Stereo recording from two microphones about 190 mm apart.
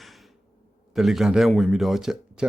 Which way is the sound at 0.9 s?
Centre (ahead or behind).